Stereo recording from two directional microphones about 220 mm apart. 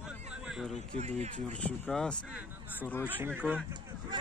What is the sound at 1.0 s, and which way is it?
Speech, 30° right (ahead or behind).